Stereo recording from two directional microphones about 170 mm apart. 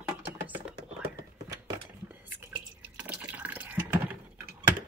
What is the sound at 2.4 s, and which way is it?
Drip, 10° right (ahead or behind).